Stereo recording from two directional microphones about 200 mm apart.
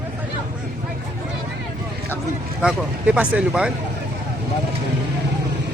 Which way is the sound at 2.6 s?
5° right (ahead or behind).